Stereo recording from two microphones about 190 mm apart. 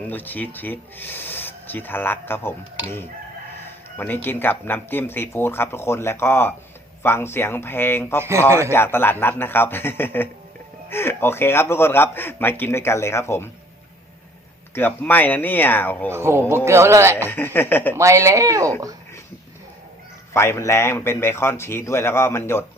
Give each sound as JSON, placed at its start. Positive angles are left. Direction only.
{"t": 0.1, "sound": "a man's voice", "side_deg": 10}
{"t": 3.9, "sound": "a man's voice", "side_deg": 10}
{"t": 8.2, "sound": "speech", "side_deg": -15}
{"t": 8.7, "sound": "a man's voice", "side_deg": 10}
{"t": 14.8, "sound": "a man's voice", "side_deg": 10}
{"t": 16.1, "sound": "speech", "side_deg": -15}
{"t": 17.2, "sound": "a man's voice", "side_deg": 10}
{"t": 17.9, "sound": "speech", "side_deg": -15}
{"t": 20.3, "sound": "a man's voice", "side_deg": 15}